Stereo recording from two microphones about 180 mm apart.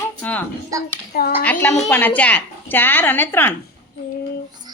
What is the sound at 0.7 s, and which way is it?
Speech, 20° right (ahead or behind).